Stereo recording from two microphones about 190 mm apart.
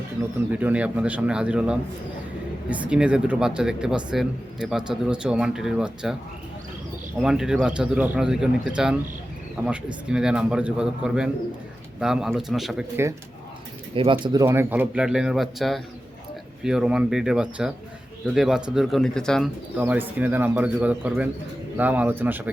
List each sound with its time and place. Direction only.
0.5 s speech: 5° right (ahead or behind)
7.2 s speech: 5° right (ahead or behind)
13.9 s speech: 25° right (ahead or behind)
14.3 s speech: 15° right (ahead or behind); by 19.5 s 5° left (ahead or behind)
19.8 s speech: 10° right (ahead or behind)